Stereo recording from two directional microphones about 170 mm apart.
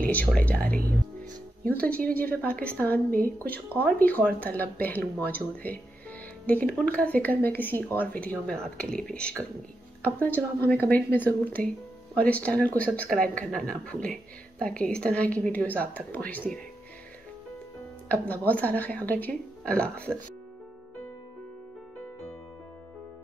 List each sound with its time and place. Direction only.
0.1 s a woman's voice: 10° left (ahead or behind)
0.7 s speech: 55° right (ahead or behind)
1.7 s a woman's voice: 10° left (ahead or behind)
18.0 s a woman's voice: 10° left (ahead or behind)